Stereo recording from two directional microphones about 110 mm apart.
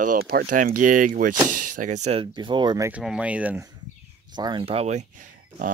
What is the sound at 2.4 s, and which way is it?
Speech, 45° right (ahead or behind).